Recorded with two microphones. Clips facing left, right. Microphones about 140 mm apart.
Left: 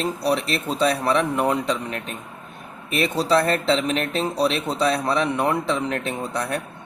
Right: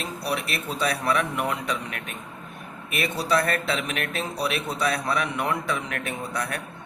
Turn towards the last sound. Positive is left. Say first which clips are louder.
# left 4 dB
turn(degrees=30)  # may be behind; listen again after turning